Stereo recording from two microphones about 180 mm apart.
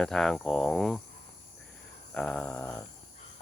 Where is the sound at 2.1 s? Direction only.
5° left (ahead or behind).